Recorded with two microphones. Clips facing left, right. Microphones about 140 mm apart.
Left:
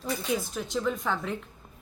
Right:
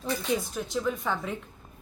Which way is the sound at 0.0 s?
Centre (ahead or behind).